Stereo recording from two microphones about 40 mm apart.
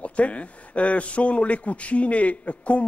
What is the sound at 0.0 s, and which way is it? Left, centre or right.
A man's voice, left.